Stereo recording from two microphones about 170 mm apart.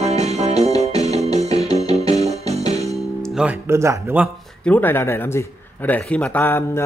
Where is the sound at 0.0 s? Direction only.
40° right (ahead or behind).